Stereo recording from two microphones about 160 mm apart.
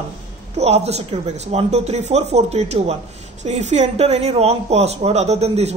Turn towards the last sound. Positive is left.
turn(degrees=-40)  # may be behind; listen again after turning